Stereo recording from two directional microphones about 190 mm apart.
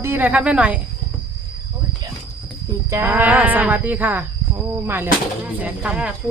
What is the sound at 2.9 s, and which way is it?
Speech, 10° right (ahead or behind).